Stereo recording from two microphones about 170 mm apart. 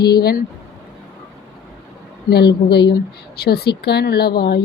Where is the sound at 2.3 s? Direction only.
70° left (ahead or behind).